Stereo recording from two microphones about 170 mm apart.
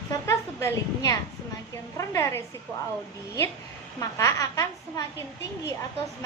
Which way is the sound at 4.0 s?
20° left (ahead or behind).